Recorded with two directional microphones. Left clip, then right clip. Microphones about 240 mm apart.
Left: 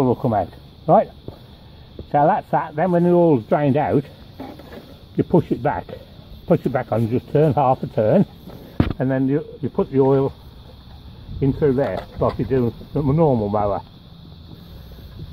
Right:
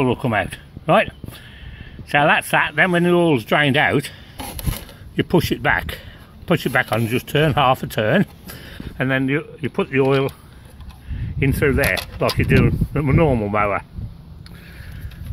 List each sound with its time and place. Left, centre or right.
0.0 s speech: right
2.0 s speech: right
5.1 s speech: centre
11.3 s speech: right